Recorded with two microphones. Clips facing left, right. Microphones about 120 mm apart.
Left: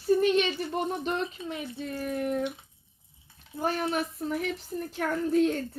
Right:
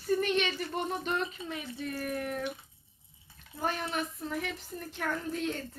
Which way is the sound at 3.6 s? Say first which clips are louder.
Left 5 dB; 45° left (ahead or behind).